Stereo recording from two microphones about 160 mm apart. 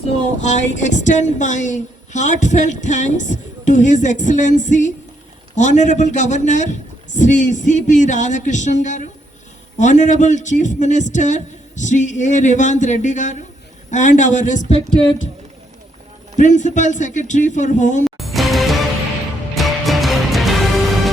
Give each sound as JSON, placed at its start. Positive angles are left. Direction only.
{"t": 0.4, "sound": "a woman's voice", "side_deg": 50}
{"t": 16.4, "sound": "a woman's voice", "side_deg": 50}
{"t": 18.0, "sound": "music", "side_deg": 0}